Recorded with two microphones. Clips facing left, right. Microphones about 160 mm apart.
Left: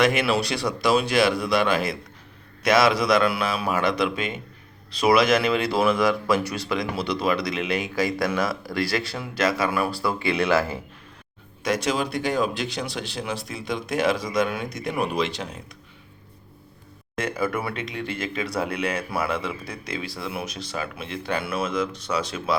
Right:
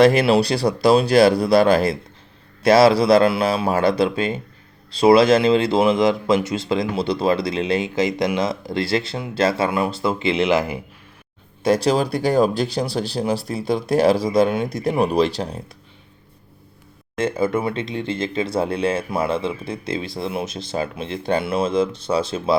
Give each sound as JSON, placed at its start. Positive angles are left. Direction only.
{"t": 0.0, "sound": "speech", "side_deg": -35}
{"t": 11.6, "sound": "speech", "side_deg": -30}
{"t": 17.2, "sound": "speech", "side_deg": -25}